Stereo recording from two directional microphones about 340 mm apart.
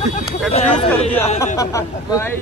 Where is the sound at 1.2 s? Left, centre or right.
Centre.